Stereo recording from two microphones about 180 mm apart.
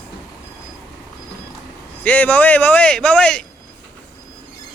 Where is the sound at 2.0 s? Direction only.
10° left (ahead or behind).